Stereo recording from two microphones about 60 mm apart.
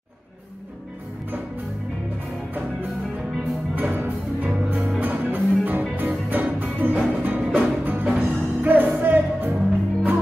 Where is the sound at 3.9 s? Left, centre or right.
Right.